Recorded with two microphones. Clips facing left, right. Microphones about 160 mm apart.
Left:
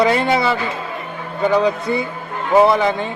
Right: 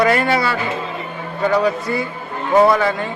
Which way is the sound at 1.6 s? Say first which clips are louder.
Left 1 dB; 25° left (ahead or behind).